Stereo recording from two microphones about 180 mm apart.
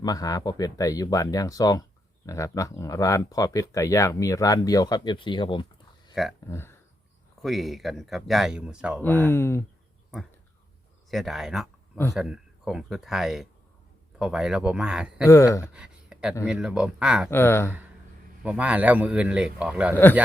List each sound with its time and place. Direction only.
0.0 s speech: 20° left (ahead or behind)
6.2 s speech: centre (ahead or behind)
6.5 s speech: 15° left (ahead or behind)
7.4 s speech: centre (ahead or behind)
9.0 s speech: 10° left (ahead or behind)
11.1 s speech: centre (ahead or behind)
15.3 s speech: 15° left (ahead or behind)
15.6 s a sound: 5° right (ahead or behind)
16.5 s speech: 5° right (ahead or behind)
17.2 s speech: 15° left (ahead or behind)
18.4 s a man's voice: 5° right (ahead or behind)
19.9 s speech: 10° left (ahead or behind)